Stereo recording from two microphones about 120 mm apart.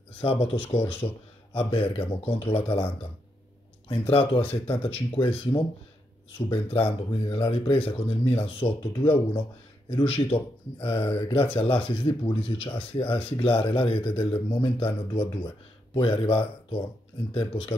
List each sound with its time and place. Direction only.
0.2 s speech: 55° left (ahead or behind)
4.1 s speech: 50° left (ahead or behind)